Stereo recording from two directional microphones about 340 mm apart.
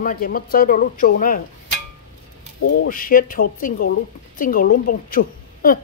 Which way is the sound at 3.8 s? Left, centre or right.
Left.